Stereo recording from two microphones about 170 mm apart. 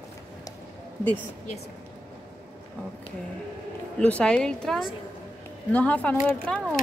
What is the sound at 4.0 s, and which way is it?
A woman's voice, 5° left (ahead or behind).